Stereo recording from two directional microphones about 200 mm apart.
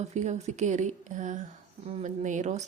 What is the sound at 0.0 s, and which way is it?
A woman's voice, 35° right (ahead or behind).